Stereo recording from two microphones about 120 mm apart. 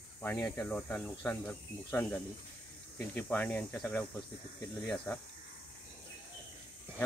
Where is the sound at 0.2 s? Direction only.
15° left (ahead or behind).